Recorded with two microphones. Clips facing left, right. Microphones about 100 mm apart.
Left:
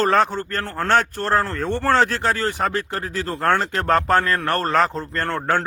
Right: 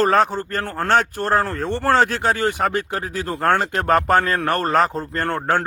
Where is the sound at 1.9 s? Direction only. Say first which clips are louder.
Right 2 dB; 45° right (ahead or behind).